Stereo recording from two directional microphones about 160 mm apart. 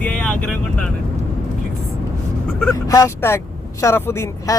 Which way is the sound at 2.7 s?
20° left (ahead or behind).